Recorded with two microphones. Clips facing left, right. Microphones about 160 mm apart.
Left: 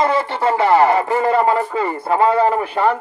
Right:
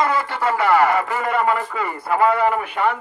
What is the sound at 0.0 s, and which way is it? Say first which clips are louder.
A man's voice: left 3 dB; 25° left (ahead or behind).